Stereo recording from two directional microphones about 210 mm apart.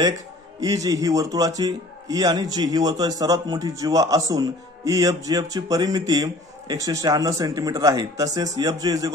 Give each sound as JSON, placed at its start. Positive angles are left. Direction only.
{"t": 0.6, "sound": "a man's voice", "side_deg": -15}